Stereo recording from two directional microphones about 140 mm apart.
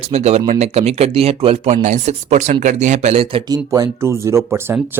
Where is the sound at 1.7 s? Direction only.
60° right (ahead or behind).